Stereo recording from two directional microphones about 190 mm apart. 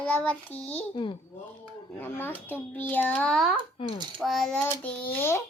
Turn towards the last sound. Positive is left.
turn(degrees=10)  # may be behind; listen again after turning